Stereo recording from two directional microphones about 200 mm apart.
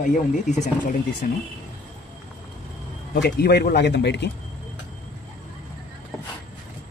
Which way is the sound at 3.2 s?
55° left (ahead or behind).